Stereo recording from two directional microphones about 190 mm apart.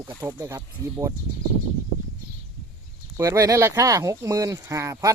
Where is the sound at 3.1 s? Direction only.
15° right (ahead or behind).